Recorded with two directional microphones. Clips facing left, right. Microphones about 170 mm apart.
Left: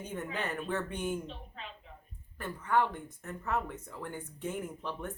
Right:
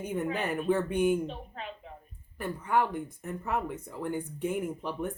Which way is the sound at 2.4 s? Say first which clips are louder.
Right 2 dB; 10° right (ahead or behind).